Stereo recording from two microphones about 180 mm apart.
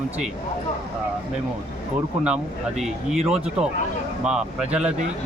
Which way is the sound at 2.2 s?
5° right (ahead or behind).